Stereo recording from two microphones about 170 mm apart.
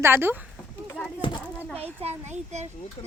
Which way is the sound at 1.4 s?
5° left (ahead or behind).